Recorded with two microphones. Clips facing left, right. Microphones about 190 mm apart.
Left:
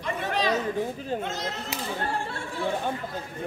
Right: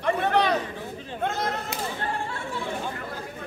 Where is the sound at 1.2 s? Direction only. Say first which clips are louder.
Right 4 dB; 55° right (ahead or behind).